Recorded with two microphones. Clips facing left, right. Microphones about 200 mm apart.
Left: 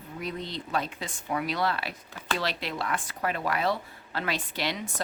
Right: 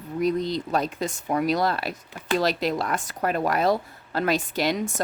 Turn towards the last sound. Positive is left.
turn(degrees=-45)  # may be behind; listen again after turning